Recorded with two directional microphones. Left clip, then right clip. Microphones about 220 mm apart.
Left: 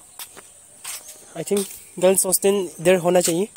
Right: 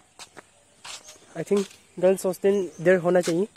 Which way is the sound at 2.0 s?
25° left (ahead or behind).